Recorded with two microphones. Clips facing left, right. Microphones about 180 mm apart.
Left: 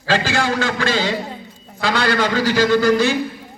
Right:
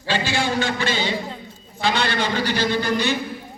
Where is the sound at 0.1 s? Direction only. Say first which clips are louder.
Left 4 dB; 90° left.